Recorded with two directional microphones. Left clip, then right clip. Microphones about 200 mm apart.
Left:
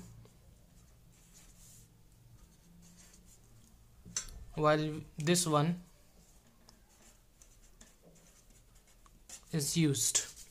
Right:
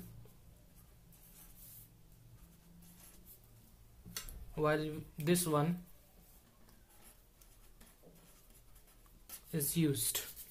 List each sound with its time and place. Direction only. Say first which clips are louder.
4.6 s speech: left 4 dB; 25° left (ahead or behind)
9.5 s speech: left 3 dB; 30° left (ahead or behind)